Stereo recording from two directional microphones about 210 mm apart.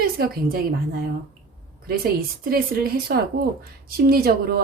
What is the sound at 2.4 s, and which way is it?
Speech, 45° right (ahead or behind).